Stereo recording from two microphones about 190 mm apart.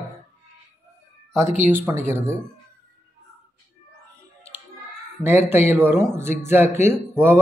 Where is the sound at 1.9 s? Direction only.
10° right (ahead or behind).